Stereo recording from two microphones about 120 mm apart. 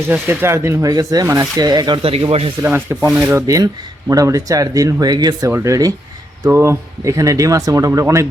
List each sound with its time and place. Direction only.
0.1 s speech: 20° right (ahead or behind)
2.0 s speech: 50° right (ahead or behind)
2.6 s speech: 20° right (ahead or behind); by 5.5 s 35° right (ahead or behind)
5.5 s speech: 20° right (ahead or behind)